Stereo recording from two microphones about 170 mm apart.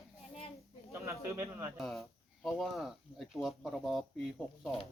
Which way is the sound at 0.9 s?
15° right (ahead or behind).